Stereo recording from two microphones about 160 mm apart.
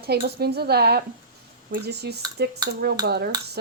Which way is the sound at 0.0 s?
90° right.